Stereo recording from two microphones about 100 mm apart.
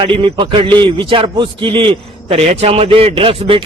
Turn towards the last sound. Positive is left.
turn(degrees=-65)  # may be behind; listen again after turning